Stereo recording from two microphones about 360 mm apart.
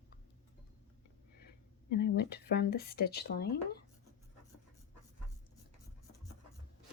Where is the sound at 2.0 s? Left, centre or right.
Left.